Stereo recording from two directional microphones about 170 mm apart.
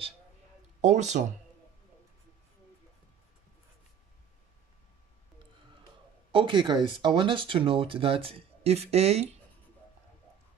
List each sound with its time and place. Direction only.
0.7 s speech: 45° right (ahead or behind)
6.3 s speech: 30° right (ahead or behind)